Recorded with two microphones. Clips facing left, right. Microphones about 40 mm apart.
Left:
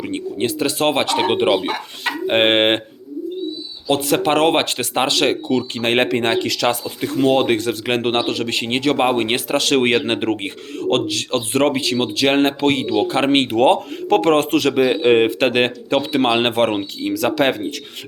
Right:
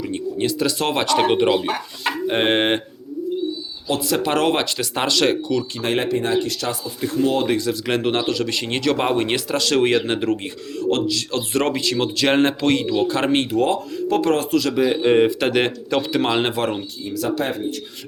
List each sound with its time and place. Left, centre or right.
0.0 s speech: left
2.2 s speech: left
3.8 s speech: left
4.9 s speech: left
5.7 s speech: left
6.1 s speech: left
7.2 s speech: left
7.9 s speech: left
8.6 s speech: left
13.4 s speech: left
14.7 s speech: left
16.5 s speech: left
17.0 s speech: left